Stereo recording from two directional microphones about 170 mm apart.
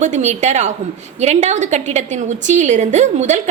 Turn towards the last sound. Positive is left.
turn(degrees=-45)  # may be behind; listen again after turning